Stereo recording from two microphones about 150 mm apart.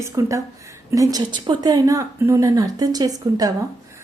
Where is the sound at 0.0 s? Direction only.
20° right (ahead or behind).